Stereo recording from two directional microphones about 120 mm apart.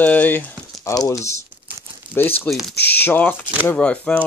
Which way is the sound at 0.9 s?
30° left (ahead or behind).